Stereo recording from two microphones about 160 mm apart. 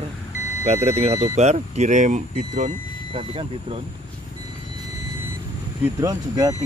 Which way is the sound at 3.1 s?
35° right (ahead or behind).